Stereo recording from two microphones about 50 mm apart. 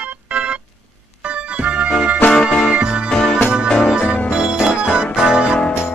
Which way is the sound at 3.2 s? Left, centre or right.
Centre.